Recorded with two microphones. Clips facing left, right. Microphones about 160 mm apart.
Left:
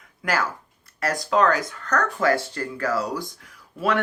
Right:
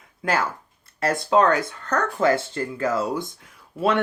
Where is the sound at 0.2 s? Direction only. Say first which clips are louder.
Right 1 dB; 25° right (ahead or behind).